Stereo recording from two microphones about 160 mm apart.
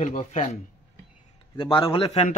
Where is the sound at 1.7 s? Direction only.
35° left (ahead or behind).